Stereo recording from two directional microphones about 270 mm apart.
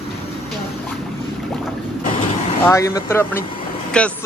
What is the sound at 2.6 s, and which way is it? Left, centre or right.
A man's voice, centre.